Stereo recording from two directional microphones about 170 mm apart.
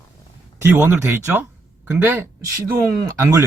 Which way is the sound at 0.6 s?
10° right (ahead or behind).